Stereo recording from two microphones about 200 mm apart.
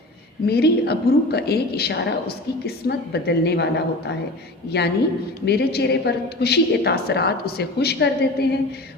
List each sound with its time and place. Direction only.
0.4 s a woman's voice: 55° left (ahead or behind)